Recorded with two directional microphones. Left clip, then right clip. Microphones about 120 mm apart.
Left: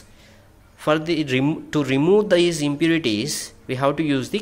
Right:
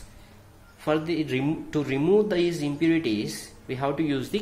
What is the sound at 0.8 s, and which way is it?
A man's voice, 60° left (ahead or behind).